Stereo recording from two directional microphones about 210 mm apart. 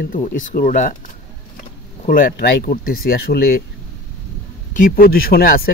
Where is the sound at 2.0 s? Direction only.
40° left (ahead or behind).